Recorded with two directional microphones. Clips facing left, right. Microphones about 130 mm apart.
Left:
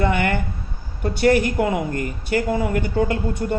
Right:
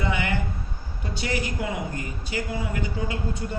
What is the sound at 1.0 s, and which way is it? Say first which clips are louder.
A woman's voice: left 12 dB; 55° left (ahead or behind).